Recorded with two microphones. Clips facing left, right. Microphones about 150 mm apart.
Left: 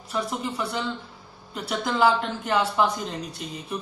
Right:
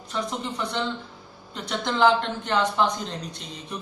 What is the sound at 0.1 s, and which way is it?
Speech, 5° left (ahead or behind).